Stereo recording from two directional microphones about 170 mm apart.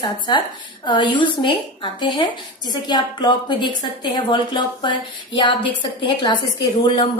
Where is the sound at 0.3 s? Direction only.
25° left (ahead or behind).